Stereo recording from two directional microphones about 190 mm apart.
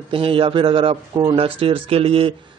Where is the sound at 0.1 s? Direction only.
30° right (ahead or behind).